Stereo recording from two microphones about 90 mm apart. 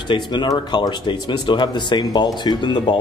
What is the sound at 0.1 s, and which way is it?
Speech, 55° left (ahead or behind).